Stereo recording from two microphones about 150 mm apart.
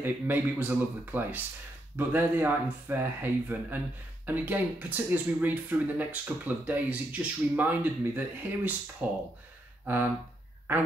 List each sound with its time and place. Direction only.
0.0 s speech: 10° right (ahead or behind)